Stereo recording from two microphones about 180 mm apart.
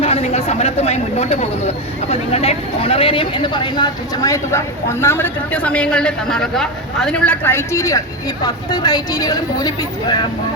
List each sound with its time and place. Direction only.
0.0 s speech: 35° left (ahead or behind)